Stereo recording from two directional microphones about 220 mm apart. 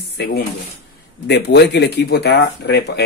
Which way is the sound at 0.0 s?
50° left (ahead or behind).